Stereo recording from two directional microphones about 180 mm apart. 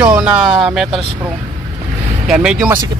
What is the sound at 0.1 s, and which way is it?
Speech, 5° right (ahead or behind).